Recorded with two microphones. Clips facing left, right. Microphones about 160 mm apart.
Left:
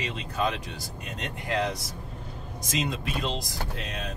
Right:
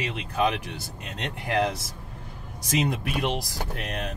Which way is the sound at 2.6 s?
65° right (ahead or behind).